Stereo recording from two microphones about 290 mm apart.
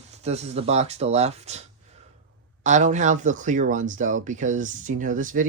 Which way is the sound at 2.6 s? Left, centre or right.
Right.